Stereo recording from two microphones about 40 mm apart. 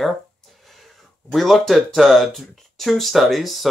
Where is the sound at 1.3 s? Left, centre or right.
Centre.